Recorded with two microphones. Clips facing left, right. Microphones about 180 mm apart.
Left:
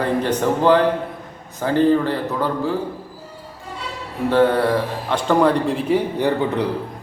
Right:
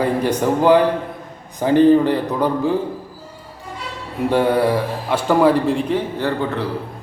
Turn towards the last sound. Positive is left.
turn(degrees=15)  # may be behind; listen again after turning